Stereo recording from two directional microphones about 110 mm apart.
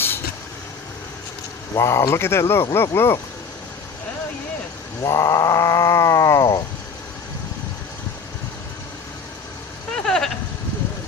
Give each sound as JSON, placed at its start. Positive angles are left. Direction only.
{"t": 1.7, "sound": "speech", "side_deg": 25}
{"t": 5.0, "sound": "speech", "side_deg": 30}
{"t": 9.9, "sound": "sheep", "side_deg": 5}